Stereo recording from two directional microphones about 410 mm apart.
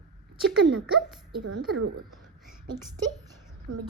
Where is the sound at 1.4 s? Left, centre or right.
Right.